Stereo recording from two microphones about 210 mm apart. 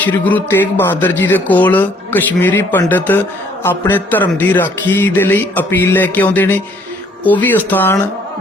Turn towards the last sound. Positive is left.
turn(degrees=10)  # may be behind; listen again after turning